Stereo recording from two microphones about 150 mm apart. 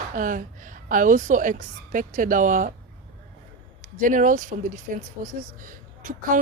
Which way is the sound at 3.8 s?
60° right (ahead or behind).